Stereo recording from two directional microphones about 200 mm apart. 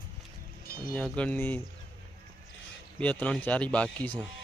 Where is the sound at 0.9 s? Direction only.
5° left (ahead or behind).